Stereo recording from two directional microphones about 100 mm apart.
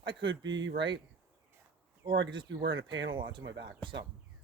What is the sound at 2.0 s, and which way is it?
Speech, 55° right (ahead or behind).